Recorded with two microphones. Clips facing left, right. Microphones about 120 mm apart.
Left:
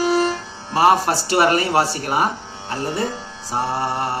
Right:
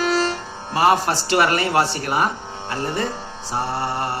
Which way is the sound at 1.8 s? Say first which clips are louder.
Left 1 dB; 40° left (ahead or behind).